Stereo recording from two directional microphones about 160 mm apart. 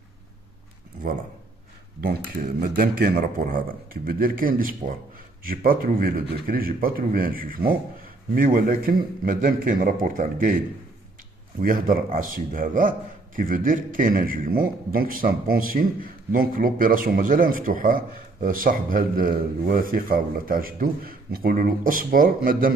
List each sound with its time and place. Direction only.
2.6 s a man's voice: 65° right (ahead or behind)
11.6 s a man's voice: 60° right (ahead or behind)